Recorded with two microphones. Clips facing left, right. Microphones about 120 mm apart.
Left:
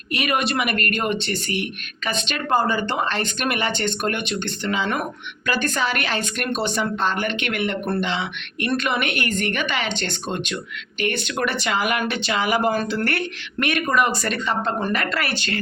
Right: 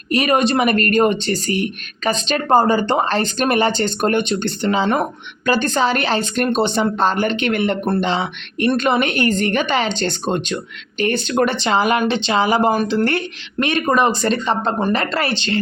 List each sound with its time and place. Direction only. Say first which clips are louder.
0.1 s speech: right 7 dB; 35° right (ahead or behind)